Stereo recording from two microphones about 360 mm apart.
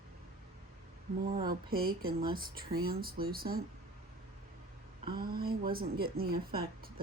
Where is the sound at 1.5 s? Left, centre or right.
Right.